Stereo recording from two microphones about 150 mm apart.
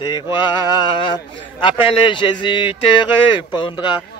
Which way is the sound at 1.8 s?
35° left (ahead or behind).